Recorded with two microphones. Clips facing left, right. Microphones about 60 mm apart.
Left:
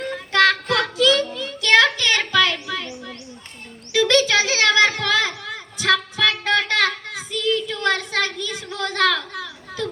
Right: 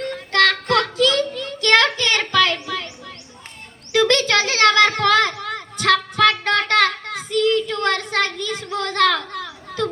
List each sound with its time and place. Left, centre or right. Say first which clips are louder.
0.9 s child singing: even; right
3.9 s children playing: even; right